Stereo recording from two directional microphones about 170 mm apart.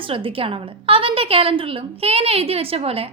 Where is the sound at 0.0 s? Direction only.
30° right (ahead or behind).